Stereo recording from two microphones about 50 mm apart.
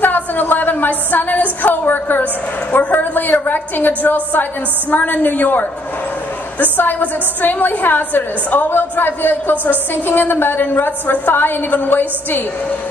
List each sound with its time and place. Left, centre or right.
0.0 s a woman's voice: left